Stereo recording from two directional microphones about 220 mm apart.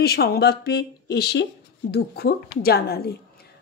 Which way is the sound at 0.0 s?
45° left (ahead or behind).